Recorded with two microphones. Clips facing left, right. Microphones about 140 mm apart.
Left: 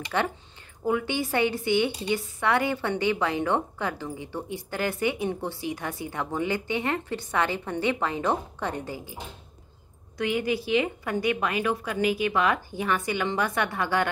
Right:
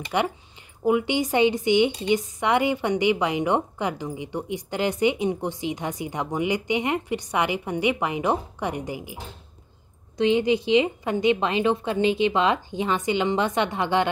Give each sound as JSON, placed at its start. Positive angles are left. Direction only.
{"t": 0.1, "sound": "a woman's voice", "side_deg": -15}